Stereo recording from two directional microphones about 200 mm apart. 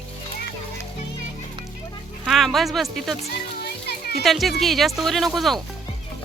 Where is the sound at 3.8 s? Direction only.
50° left (ahead or behind).